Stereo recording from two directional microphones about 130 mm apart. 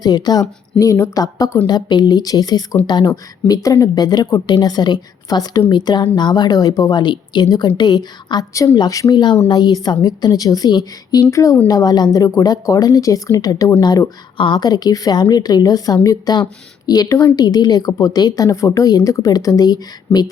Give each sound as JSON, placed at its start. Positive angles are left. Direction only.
{"t": 0.0, "sound": "a woman's voice", "side_deg": 30}